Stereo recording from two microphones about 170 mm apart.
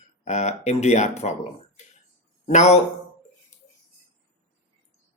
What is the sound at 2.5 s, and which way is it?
Speech, 40° left (ahead or behind).